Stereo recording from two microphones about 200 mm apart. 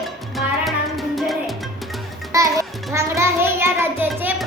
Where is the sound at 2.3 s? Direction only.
15° right (ahead or behind).